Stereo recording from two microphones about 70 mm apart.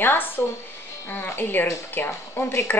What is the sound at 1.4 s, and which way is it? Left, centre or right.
A woman's voice, left.